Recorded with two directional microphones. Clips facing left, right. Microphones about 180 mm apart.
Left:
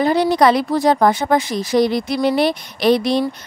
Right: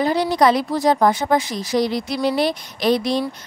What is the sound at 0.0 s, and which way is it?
A woman's voice, 60° left (ahead or behind).